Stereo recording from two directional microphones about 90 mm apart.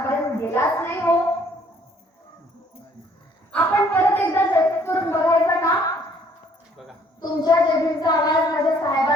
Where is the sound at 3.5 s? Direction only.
20° left (ahead or behind).